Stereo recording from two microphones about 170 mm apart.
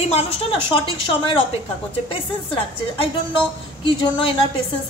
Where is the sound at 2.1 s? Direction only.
30° left (ahead or behind).